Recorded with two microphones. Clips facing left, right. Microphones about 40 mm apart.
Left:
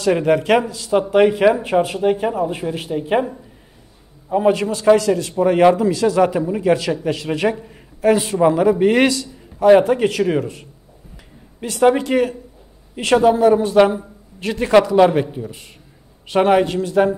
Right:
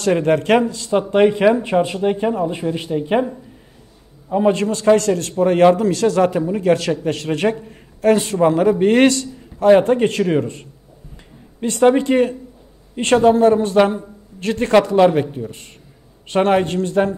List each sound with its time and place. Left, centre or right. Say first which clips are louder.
0.0 s a man's voice: even; centre
11.7 s a man's voice: right 1 dB; centre